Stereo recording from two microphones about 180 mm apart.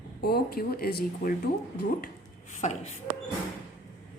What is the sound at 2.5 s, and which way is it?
Speech, 40° left (ahead or behind).